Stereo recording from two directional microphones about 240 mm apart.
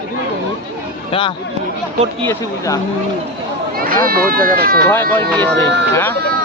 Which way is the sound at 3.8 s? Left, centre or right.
Right.